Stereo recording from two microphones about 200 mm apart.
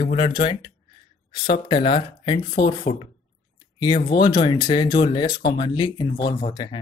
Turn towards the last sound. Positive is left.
turn(degrees=20)  # may be behind; listen again after turning